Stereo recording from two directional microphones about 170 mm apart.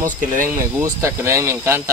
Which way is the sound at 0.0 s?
50° right (ahead or behind).